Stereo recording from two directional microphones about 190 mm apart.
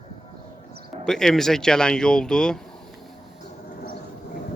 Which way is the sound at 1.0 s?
5° left (ahead or behind).